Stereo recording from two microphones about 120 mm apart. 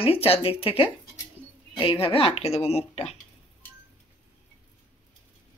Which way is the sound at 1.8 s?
50° left (ahead or behind).